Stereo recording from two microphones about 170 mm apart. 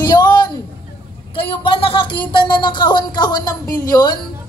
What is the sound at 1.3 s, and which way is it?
A woman's voice, 30° left (ahead or behind).